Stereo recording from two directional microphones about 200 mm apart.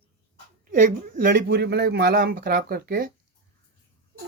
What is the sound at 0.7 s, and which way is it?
Speech, 45° right (ahead or behind).